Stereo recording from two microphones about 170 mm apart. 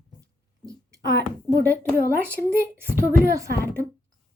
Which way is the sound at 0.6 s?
20° right (ahead or behind).